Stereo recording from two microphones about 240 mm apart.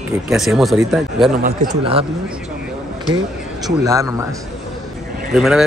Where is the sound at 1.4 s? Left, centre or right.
Right.